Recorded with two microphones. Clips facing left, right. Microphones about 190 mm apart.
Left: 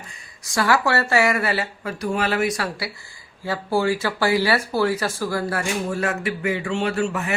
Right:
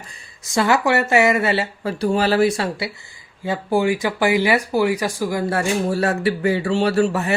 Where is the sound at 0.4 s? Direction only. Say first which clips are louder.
Right 3 dB; 20° right (ahead or behind).